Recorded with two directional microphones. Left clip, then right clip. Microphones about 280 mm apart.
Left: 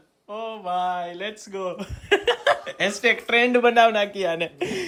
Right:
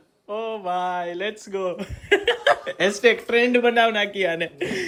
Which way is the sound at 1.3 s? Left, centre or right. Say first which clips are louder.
Right 4 dB; centre.